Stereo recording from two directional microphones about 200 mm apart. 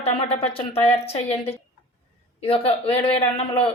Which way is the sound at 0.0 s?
30° left (ahead or behind).